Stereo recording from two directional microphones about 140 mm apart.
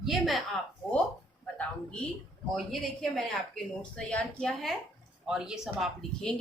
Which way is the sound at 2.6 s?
Centre (ahead or behind).